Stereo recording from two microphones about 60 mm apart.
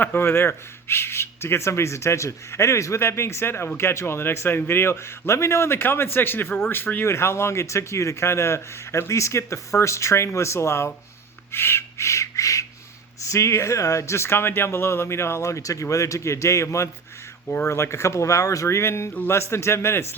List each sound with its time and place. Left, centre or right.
0.0 s a man's voice: left
11.5 s a sound: left
13.3 s a man's voice: left